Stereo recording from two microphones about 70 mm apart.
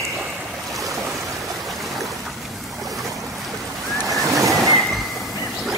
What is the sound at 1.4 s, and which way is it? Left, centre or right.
Stream, centre.